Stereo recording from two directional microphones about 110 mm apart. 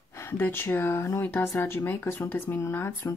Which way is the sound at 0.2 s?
20° left (ahead or behind).